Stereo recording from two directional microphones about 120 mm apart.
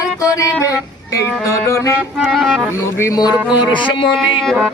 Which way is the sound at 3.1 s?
35° left (ahead or behind).